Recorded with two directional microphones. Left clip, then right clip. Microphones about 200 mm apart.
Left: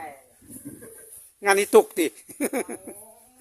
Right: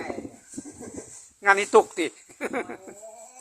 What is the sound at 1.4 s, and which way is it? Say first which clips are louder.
Speech: left 1 dB; 65° left (ahead or behind).